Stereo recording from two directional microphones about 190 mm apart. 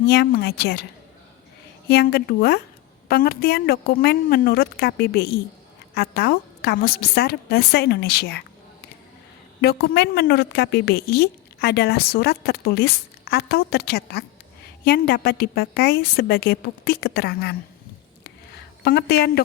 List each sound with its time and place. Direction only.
0.0 s a woman's voice: 55° left (ahead or behind)
1.9 s a woman's voice: 55° left (ahead or behind)
9.6 s a woman's voice: 60° left (ahead or behind)
18.9 s a woman's voice: 60° left (ahead or behind)